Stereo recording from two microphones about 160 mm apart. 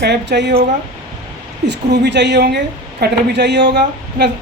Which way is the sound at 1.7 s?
90° right.